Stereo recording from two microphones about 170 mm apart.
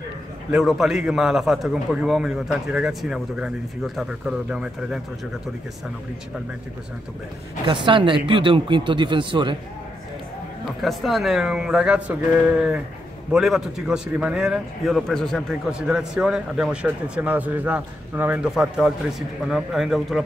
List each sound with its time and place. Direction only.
0.5 s a man's voice: 5° right (ahead or behind)
7.6 s speech: 30° right (ahead or behind)
10.8 s a man's voice: centre (ahead or behind)